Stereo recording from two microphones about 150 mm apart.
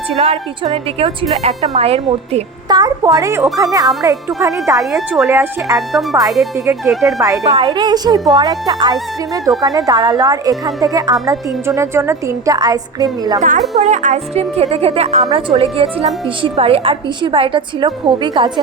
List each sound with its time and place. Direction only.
0.2 s a woman's voice: 35° right (ahead or behind)
2.6 s a woman's voice: 25° right (ahead or behind)
4.8 s speech: centre (ahead or behind)
5.3 s a woman's voice: 20° right (ahead or behind)
5.7 s speech: centre (ahead or behind)
7.2 s a woman's voice: 25° right (ahead or behind)
13.7 s a woman's voice: 50° right (ahead or behind); by 18.6 s 30° right (ahead or behind)